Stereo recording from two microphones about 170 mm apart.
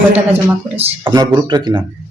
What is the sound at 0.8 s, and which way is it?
Speech, 25° right (ahead or behind).